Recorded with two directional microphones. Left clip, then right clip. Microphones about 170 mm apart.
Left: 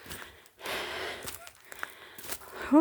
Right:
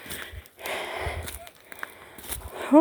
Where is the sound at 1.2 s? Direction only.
55° right (ahead or behind).